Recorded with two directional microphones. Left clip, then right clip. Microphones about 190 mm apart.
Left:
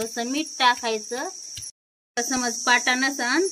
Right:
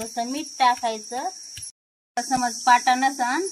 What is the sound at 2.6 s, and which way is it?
Speech, 10° right (ahead or behind).